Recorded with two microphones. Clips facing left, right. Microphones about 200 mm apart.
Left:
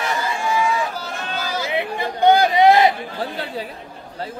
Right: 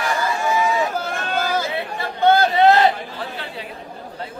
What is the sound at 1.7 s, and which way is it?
Chatter, 15° left (ahead or behind).